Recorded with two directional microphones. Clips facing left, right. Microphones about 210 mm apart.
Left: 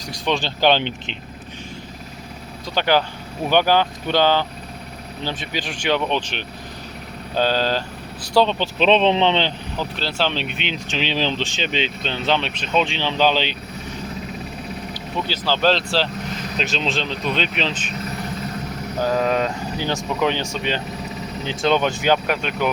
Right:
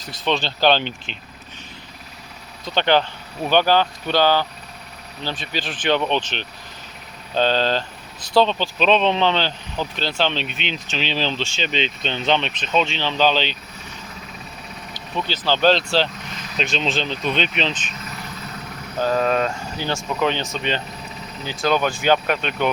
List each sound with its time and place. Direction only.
0.0 s speech: 15° left (ahead or behind)
2.6 s speech: 10° left (ahead or behind); by 9.5 s 25° left (ahead or behind)
9.7 s speech: 5° left (ahead or behind)
14.9 s speech: 5° left (ahead or behind)
18.9 s speech: 15° left (ahead or behind)
21.6 s speech: 25° left (ahead or behind)